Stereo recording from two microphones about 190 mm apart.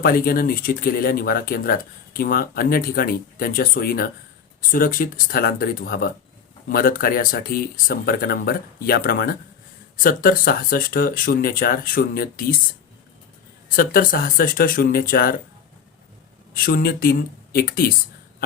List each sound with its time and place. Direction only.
0.0 s speech: 50° left (ahead or behind)
13.7 s speech: 50° left (ahead or behind)
16.6 s speech: 50° left (ahead or behind)